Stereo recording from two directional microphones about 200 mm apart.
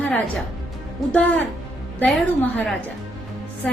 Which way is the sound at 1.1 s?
5° left (ahead or behind).